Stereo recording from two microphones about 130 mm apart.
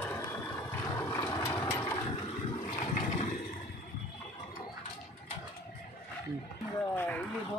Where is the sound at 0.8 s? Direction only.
20° left (ahead or behind).